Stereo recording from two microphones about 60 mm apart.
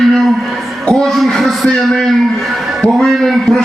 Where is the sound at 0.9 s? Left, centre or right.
Centre.